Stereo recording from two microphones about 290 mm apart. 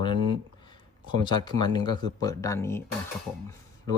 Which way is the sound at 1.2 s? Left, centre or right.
Centre.